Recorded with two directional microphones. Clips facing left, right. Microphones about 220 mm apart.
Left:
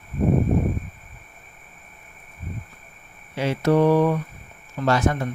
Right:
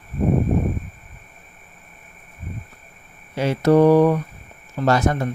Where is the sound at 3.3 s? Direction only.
45° right (ahead or behind).